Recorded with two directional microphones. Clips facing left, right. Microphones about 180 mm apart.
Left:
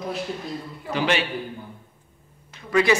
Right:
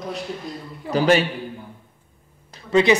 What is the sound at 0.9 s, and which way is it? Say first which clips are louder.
Speech: right 6 dB; 40° right (ahead or behind).